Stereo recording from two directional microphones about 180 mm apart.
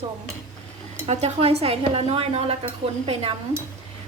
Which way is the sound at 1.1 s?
35° right (ahead or behind).